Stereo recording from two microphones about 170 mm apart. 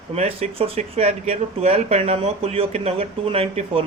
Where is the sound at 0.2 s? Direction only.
40° right (ahead or behind).